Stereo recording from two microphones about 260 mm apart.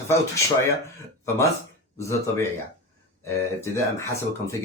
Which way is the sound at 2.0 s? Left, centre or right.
Centre.